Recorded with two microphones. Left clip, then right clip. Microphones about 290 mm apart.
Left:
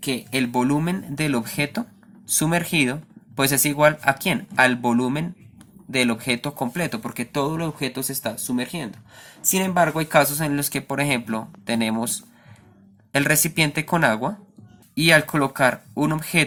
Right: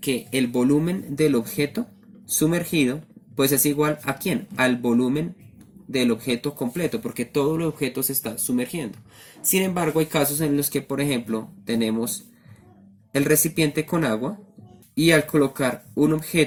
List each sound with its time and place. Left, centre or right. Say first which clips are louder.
0.0 s speech: even; left